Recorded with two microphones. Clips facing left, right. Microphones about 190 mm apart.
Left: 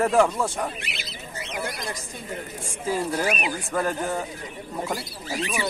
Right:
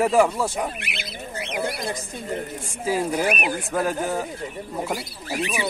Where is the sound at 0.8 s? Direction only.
60° right (ahead or behind).